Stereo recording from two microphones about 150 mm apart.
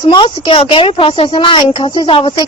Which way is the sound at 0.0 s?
30° left (ahead or behind).